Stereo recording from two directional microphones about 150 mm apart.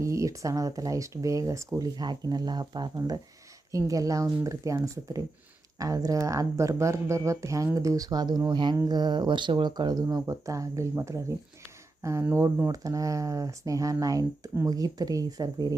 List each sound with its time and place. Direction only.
0.0 s speech: 20° right (ahead or behind)